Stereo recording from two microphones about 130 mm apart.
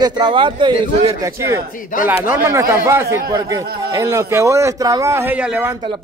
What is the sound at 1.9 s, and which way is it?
Speech, 90° left.